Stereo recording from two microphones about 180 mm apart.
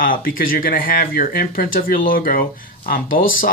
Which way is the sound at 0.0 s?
50° left (ahead or behind).